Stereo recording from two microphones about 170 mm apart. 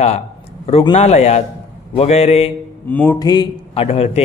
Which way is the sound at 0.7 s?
35° left (ahead or behind).